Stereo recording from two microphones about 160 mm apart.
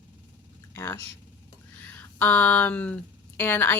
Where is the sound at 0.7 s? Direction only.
15° left (ahead or behind).